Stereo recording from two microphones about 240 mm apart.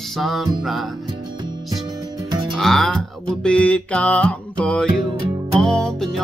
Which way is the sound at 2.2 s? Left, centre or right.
Centre.